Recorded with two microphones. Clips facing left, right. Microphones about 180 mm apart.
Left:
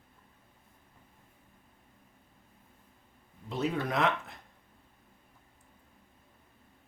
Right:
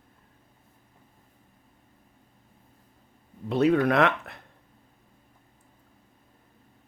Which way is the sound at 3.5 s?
65° right (ahead or behind).